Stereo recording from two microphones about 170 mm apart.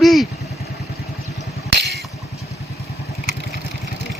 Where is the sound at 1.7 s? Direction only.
75° right (ahead or behind).